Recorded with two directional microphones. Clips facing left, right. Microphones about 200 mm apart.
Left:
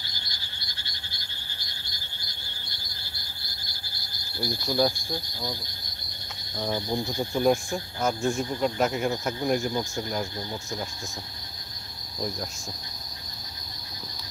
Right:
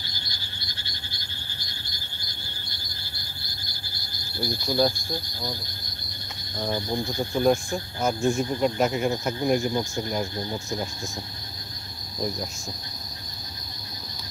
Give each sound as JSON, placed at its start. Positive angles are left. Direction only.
{"t": 4.4, "sound": "speech", "side_deg": 0}
{"t": 6.7, "sound": "speech", "side_deg": 5}